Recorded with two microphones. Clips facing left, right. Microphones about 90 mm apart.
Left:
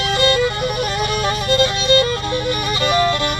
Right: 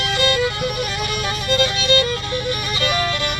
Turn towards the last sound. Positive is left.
turn(degrees=35)  # may be behind; listen again after turning